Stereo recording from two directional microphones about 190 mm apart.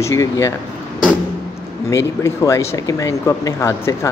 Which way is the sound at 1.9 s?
15° left (ahead or behind).